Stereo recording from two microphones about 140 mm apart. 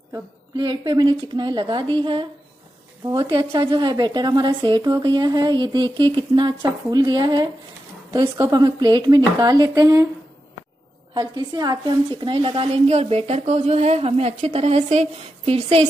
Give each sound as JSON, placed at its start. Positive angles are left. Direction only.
{"t": 0.6, "sound": "a woman's voice", "side_deg": -30}
{"t": 11.1, "sound": "a woman's voice", "side_deg": -30}